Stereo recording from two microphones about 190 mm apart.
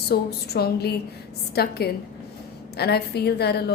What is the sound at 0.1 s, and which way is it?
A woman's voice, 55° left (ahead or behind).